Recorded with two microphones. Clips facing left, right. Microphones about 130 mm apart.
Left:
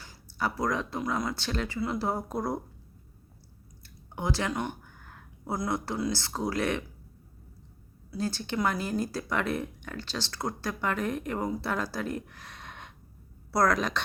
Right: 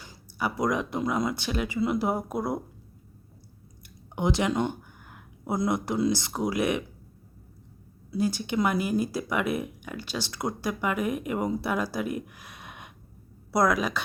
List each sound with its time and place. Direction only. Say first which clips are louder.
0.0 s speech: right 1 dB; 15° right (ahead or behind)
3.8 s a sound: right 5 dB; 20° right (ahead or behind)
5.5 s speech: right 5 dB; 20° right (ahead or behind)
8.1 s speech: right 5 dB; 15° right (ahead or behind)